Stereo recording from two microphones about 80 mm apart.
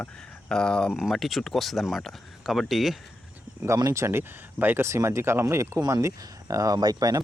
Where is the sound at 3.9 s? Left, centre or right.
Right.